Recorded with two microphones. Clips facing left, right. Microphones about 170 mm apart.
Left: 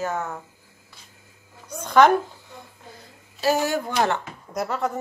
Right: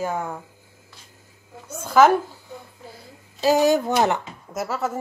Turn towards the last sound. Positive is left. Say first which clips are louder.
# even
turn(degrees=-5)  # may be behind; listen again after turning